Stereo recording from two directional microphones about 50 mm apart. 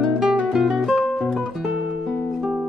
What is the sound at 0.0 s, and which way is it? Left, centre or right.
Guitar, centre.